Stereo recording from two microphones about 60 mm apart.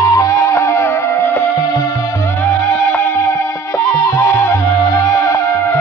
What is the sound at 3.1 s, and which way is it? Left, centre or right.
Music, left.